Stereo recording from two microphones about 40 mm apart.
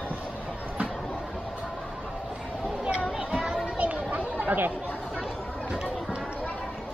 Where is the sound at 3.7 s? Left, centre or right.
Right.